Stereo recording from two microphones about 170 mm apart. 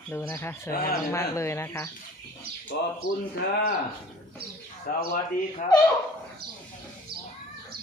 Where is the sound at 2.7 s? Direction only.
70° left (ahead or behind).